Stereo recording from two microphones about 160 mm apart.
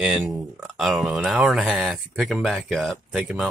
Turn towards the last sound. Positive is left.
turn(degrees=0)  # may be behind; listen again after turning